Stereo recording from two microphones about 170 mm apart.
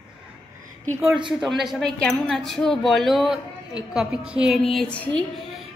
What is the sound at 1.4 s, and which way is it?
A woman's voice, centre (ahead or behind).